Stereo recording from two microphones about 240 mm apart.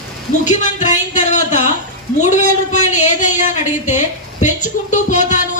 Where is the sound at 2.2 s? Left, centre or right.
Left.